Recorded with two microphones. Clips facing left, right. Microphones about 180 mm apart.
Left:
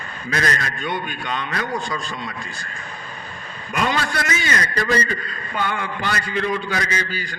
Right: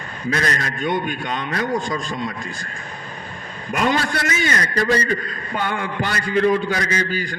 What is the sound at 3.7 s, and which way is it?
A man's voice, 45° right (ahead or behind).